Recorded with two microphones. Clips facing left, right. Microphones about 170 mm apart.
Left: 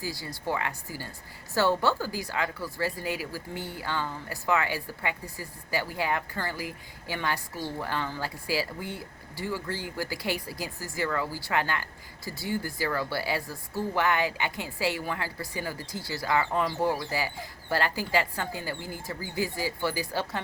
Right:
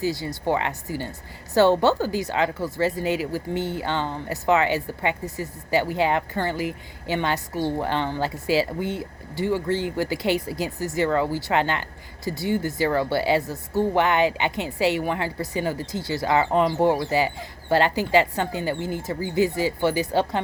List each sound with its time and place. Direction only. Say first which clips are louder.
0.0 s speech: right 9 dB; 20° right (ahead or behind)